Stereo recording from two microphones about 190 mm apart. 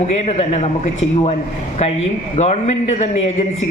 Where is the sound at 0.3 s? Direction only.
35° left (ahead or behind).